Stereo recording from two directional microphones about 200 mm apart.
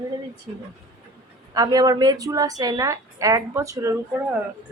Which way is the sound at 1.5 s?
20° right (ahead or behind).